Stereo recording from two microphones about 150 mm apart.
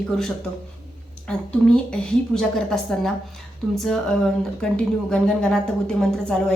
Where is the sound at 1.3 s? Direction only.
5° left (ahead or behind).